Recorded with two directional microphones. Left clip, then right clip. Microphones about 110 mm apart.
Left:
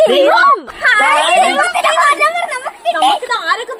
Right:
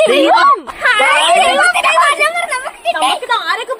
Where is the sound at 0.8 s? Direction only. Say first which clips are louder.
Even; 15° right (ahead or behind).